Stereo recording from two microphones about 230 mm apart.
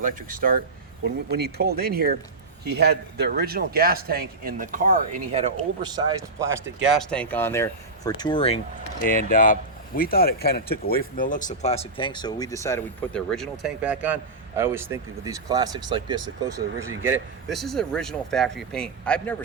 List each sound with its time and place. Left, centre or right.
0.0 s speech: right
5.8 s speech: centre
6.8 s speech: centre
17.1 s speech: centre